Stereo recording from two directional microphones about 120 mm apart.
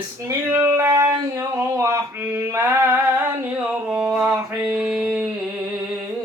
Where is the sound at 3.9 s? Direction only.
5° right (ahead or behind).